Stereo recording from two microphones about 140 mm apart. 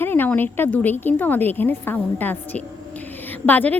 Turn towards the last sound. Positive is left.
turn(degrees=10)  # may be behind; listen again after turning